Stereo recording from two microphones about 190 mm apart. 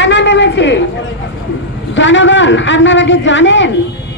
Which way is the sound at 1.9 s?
75° left (ahead or behind).